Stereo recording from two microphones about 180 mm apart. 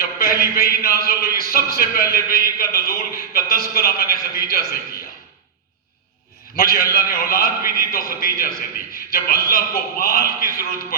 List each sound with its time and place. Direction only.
0.0 s a sound: 55° left (ahead or behind)
0.5 s a man's voice: 55° left (ahead or behind)
6.6 s a man's voice: 55° left (ahead or behind)